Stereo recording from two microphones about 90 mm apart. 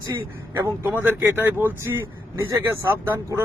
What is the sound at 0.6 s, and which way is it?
Speech, 25° right (ahead or behind).